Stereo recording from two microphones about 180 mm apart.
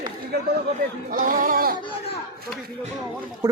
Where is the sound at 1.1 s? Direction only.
50° right (ahead or behind).